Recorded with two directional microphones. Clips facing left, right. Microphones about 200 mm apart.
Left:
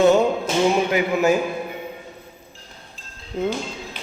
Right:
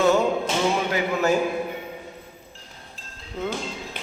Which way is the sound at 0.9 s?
15° left (ahead or behind).